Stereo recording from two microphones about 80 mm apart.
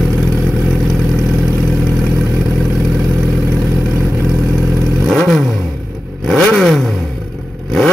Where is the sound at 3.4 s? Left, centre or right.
Right.